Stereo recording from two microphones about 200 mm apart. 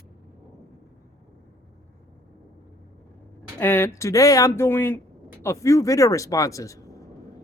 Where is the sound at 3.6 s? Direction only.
10° left (ahead or behind).